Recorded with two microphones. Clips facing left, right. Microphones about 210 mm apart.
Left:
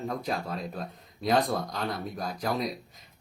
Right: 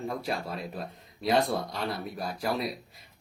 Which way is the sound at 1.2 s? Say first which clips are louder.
Even; centre (ahead or behind).